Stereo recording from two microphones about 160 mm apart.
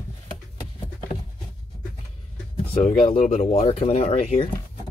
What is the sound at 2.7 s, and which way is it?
Speech, 35° left (ahead or behind).